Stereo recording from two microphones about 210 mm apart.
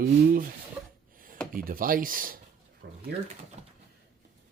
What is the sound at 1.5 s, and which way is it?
Speech, 40° right (ahead or behind).